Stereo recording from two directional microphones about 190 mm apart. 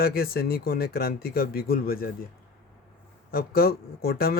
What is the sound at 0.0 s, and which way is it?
Speech, 55° left (ahead or behind).